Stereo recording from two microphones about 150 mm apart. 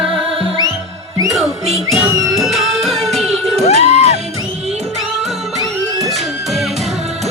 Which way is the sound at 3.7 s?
45° left (ahead or behind).